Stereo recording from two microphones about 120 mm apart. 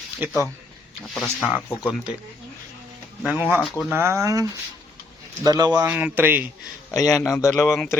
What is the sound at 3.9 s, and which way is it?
Speech, 20° right (ahead or behind).